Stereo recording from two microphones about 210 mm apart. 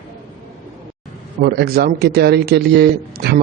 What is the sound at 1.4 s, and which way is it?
Speech, 50° right (ahead or behind).